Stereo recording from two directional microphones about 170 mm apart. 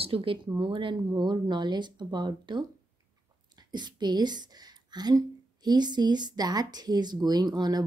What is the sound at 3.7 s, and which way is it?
Speech, 25° right (ahead or behind).